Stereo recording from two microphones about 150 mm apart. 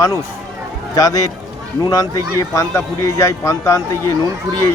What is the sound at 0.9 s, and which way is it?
Speech, 25° left (ahead or behind).